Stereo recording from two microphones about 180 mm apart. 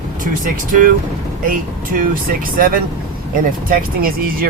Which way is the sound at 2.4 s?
50° right (ahead or behind).